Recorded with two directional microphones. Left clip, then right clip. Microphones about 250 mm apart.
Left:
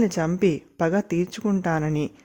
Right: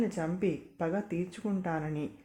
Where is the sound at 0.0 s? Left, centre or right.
Left.